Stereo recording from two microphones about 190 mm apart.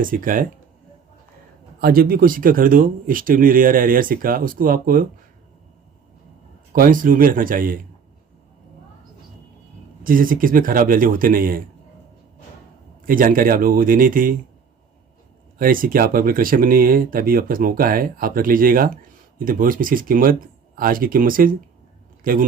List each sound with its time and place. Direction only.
0.0 s speech: 45° right (ahead or behind)
1.8 s speech: 50° right (ahead or behind)
6.7 s speech: 45° right (ahead or behind)
10.0 s speech: 45° right (ahead or behind)
13.1 s speech: 45° right (ahead or behind)
15.5 s speech: 50° right (ahead or behind)